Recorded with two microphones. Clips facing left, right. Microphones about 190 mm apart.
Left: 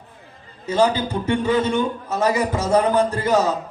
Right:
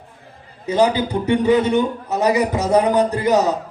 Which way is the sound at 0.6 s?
15° right (ahead or behind).